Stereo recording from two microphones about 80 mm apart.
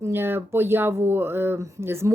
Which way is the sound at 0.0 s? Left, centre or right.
Right.